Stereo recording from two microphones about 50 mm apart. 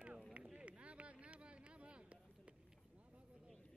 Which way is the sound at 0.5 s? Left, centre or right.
Right.